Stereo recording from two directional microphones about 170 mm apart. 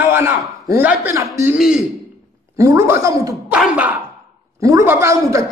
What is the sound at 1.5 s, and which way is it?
Speech, 5° right (ahead or behind).